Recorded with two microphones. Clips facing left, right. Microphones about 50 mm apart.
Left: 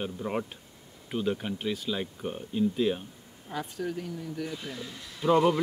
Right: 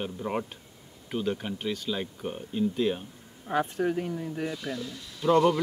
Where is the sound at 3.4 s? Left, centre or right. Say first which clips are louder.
Right 7 dB; right.